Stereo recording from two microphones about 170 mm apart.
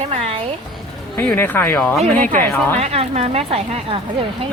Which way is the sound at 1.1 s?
10° left (ahead or behind).